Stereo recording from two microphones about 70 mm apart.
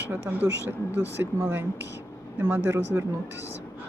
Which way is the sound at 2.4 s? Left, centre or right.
Right.